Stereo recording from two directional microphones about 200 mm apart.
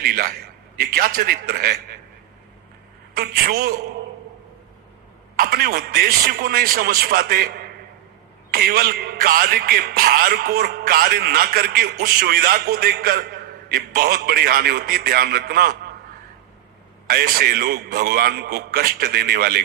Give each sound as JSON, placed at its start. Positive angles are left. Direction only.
{"t": 0.0, "sound": "speech", "side_deg": -50}
{"t": 3.2, "sound": "speech", "side_deg": -50}
{"t": 5.4, "sound": "speech", "side_deg": -50}
{"t": 17.1, "sound": "speech", "side_deg": -45}